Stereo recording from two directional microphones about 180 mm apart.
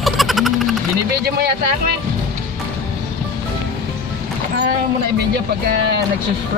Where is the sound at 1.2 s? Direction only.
60° right (ahead or behind).